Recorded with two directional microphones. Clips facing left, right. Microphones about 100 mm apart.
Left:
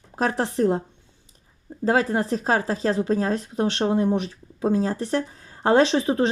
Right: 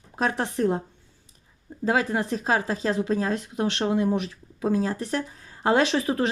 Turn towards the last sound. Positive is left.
turn(degrees=30)  # may be behind; listen again after turning